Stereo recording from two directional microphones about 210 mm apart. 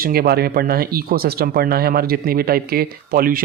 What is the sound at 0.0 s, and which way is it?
Speech, 45° right (ahead or behind).